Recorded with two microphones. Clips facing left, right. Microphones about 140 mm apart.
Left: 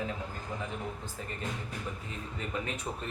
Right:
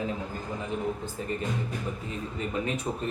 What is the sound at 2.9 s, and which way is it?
Speech, 15° right (ahead or behind).